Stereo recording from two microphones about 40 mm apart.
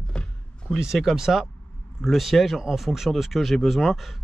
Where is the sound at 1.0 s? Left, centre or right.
Centre.